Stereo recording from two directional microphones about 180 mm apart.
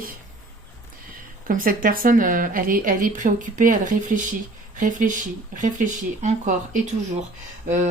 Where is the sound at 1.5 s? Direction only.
50° right (ahead or behind).